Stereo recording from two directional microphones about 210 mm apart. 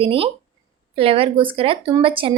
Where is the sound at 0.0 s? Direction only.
25° right (ahead or behind).